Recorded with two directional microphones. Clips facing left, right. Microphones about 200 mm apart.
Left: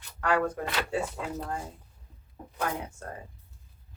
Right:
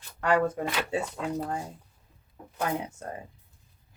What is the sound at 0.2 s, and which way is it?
Speech, 25° right (ahead or behind).